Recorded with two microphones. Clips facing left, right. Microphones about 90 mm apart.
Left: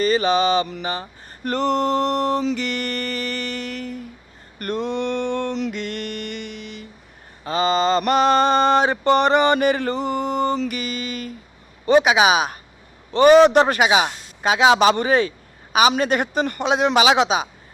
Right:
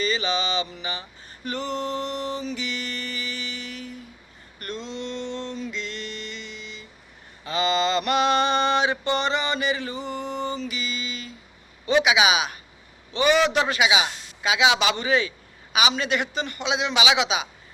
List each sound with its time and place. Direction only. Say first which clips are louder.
0.0 s mantra: left 8 dB; 45° left (ahead or behind)
1.5 s mantra: left 9 dB; 60° left (ahead or behind)
4.6 s a sound: left 9 dB; 55° left (ahead or behind)
7.4 s mantra: left 4 dB; 40° left (ahead or behind)
11.9 s a man's voice: left 5 dB; 40° left (ahead or behind)
13.1 s mantra: left 9 dB; 45° left (ahead or behind)